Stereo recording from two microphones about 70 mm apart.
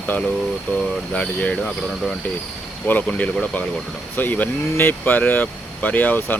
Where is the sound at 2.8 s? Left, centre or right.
Left.